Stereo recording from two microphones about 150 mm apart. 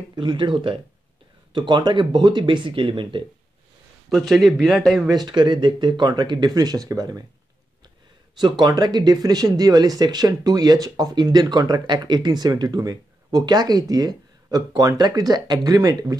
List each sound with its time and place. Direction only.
0.1 s speech: 30° right (ahead or behind)
4.1 s speech: centre (ahead or behind)
5.1 s speech: 30° right (ahead or behind)
8.4 s speech: 30° right (ahead or behind)